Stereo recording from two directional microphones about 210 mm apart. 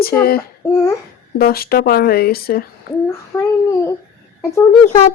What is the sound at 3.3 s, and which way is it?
Speech, 10° left (ahead or behind).